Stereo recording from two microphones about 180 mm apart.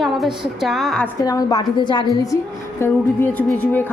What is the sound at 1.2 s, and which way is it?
Speech, 20° left (ahead or behind).